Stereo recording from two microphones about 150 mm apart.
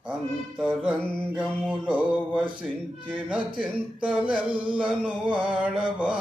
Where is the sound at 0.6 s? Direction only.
5° right (ahead or behind).